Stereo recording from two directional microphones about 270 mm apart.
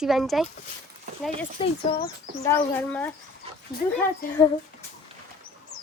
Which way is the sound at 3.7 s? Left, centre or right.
Left.